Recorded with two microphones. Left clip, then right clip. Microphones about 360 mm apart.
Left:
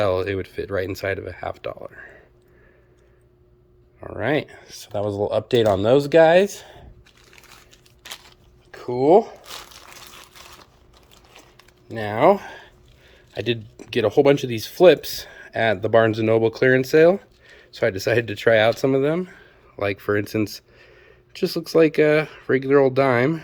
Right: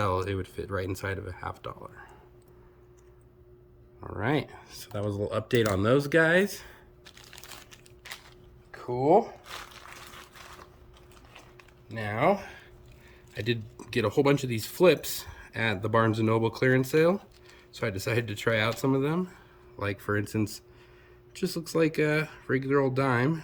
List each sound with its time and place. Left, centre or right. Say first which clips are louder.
0.0 s speech: left 8 dB; centre
4.0 s speech: left 7 dB; centre
7.3 s crumpling: even; centre
8.7 s crumpling: left 7 dB; left
11.9 s speech: left 9 dB; centre